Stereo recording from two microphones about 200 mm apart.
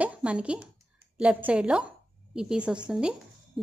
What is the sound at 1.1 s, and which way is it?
A woman's voice, 5° right (ahead or behind).